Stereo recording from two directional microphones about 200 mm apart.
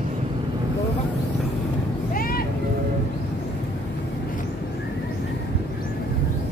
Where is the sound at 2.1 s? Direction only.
45° left (ahead or behind).